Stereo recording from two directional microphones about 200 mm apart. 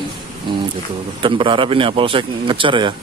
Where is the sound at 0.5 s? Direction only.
25° right (ahead or behind).